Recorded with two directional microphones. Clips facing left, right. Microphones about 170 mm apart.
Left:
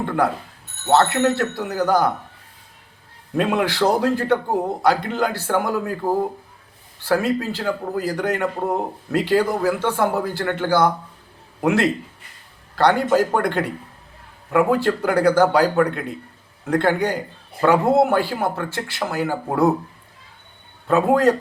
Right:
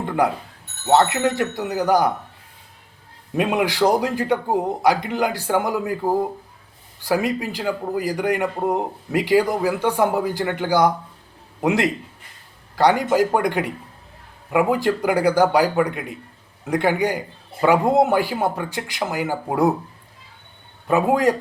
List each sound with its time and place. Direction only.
0.9 s speech: 15° right (ahead or behind)
3.3 s speech: 15° right (ahead or behind)
20.8 s speech: 15° right (ahead or behind)